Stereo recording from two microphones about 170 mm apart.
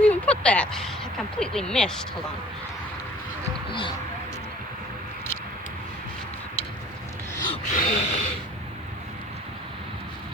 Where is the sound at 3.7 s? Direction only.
30° left (ahead or behind).